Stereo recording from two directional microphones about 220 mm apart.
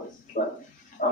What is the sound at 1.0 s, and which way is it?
Dog, 40° left (ahead or behind).